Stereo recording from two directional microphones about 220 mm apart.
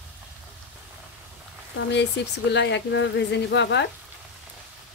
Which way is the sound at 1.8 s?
55° left (ahead or behind).